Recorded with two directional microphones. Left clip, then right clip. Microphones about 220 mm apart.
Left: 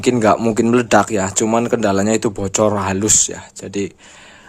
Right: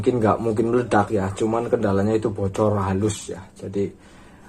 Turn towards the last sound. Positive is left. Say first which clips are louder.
# left 2 dB
turn(degrees=40)  # may be behind; listen again after turning